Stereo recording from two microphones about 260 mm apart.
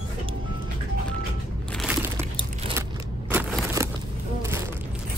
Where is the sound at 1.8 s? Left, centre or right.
Centre.